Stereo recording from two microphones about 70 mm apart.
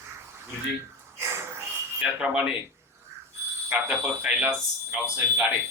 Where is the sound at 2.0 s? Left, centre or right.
Centre.